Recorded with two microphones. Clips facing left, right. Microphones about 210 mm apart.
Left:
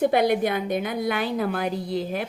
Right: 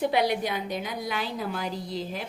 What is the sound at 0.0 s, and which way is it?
A woman's voice, 50° left (ahead or behind).